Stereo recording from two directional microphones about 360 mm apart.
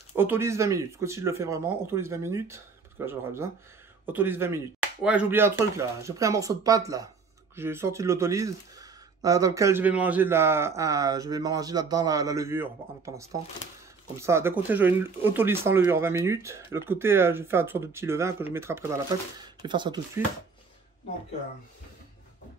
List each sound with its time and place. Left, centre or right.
0.1 s speech: centre